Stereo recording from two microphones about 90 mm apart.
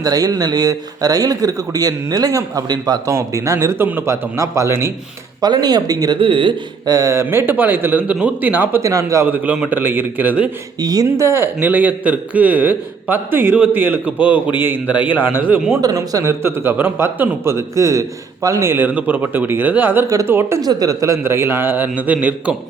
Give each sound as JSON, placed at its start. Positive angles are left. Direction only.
{"t": 0.0, "sound": "speech", "side_deg": -45}
{"t": 5.4, "sound": "speech", "side_deg": -50}
{"t": 6.1, "sound": "speech", "side_deg": -70}
{"t": 6.8, "sound": "a man's voice", "side_deg": -45}
{"t": 8.8, "sound": "speech", "side_deg": -35}
{"t": 9.2, "sound": "a man's voice", "side_deg": -20}
{"t": 10.8, "sound": "speech", "side_deg": -45}
{"t": 11.3, "sound": "a man's voice", "side_deg": -25}
{"t": 15.8, "sound": "a man's voice", "side_deg": -40}
{"t": 20.1, "sound": "a man's voice", "side_deg": -40}
{"t": 20.6, "sound": "a man's voice", "side_deg": -45}